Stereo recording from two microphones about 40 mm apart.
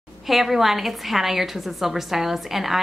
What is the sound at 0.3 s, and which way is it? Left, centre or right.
A woman's voice, centre.